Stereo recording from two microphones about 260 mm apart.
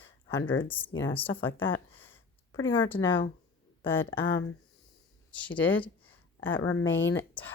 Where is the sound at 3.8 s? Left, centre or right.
Centre.